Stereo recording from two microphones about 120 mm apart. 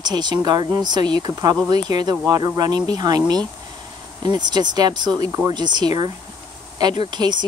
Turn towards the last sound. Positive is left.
turn(degrees=-40)  # may be behind; listen again after turning